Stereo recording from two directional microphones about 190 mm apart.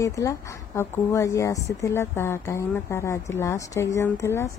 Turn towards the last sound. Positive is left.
turn(degrees=15)  # may be behind; listen again after turning